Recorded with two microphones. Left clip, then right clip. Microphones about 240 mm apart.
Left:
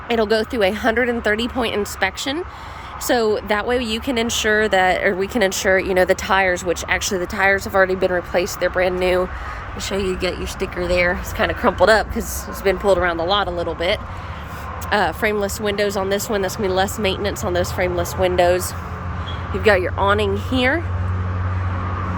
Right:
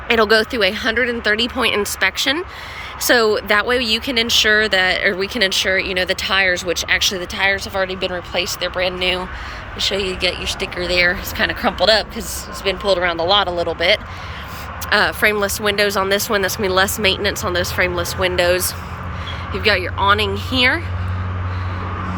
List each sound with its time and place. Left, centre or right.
0.1 s speech: centre